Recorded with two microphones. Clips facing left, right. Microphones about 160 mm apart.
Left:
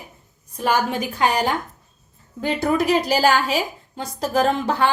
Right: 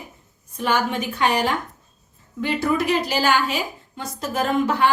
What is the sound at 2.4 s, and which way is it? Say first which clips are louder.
A woman's voice: left 1 dB; 40° left (ahead or behind).